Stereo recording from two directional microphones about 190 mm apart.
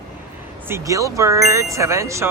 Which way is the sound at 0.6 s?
15° right (ahead or behind).